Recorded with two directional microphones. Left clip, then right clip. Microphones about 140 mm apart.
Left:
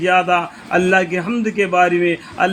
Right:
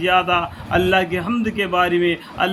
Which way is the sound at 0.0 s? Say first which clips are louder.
Left 2 dB; 40° left (ahead or behind).